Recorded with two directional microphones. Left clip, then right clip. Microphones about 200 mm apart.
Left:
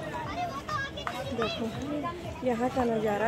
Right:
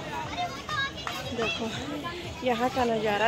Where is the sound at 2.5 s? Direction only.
5° left (ahead or behind).